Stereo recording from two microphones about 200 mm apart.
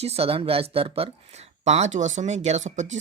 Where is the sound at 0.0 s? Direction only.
30° right (ahead or behind).